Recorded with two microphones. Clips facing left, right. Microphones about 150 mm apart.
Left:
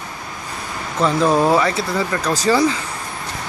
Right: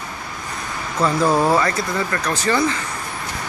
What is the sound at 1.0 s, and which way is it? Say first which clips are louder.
Speech: left 1 dB; 20° left (ahead or behind).